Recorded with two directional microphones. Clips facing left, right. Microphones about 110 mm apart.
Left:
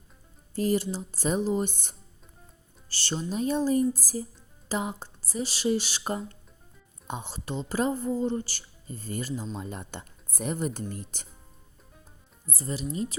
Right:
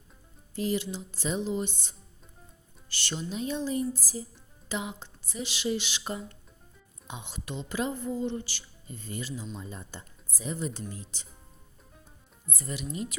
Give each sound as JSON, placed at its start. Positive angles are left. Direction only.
{"t": 0.5, "sound": "speech", "side_deg": 45}
{"t": 2.9, "sound": "a woman's voice", "side_deg": 35}
{"t": 9.6, "sound": "speech", "side_deg": 65}
{"t": 12.5, "sound": "a woman's voice", "side_deg": 35}